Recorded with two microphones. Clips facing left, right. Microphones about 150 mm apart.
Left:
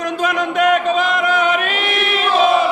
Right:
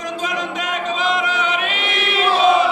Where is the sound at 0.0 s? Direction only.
60° left (ahead or behind).